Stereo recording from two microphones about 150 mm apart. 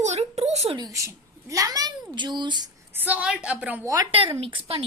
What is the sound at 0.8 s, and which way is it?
A woman's voice, 20° right (ahead or behind).